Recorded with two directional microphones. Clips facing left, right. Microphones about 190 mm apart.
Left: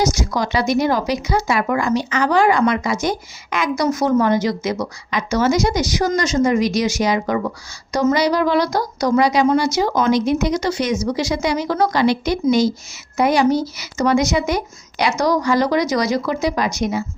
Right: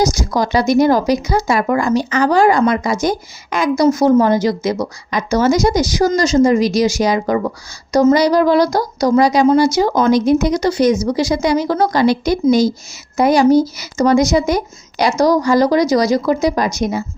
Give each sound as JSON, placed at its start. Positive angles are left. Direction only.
{"t": 0.0, "sound": "a woman's voice", "side_deg": -35}